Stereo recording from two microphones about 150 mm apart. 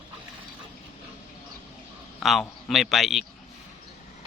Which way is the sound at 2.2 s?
Centre (ahead or behind).